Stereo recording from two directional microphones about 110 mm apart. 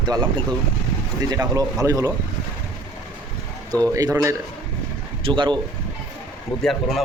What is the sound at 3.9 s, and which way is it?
Speech, 30° right (ahead or behind).